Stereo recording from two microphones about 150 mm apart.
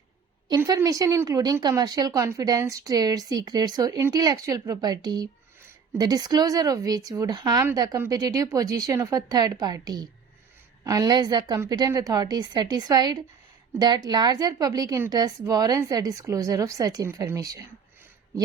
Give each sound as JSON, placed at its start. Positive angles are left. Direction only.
{"t": 0.4, "sound": "a woman's voice", "side_deg": -25}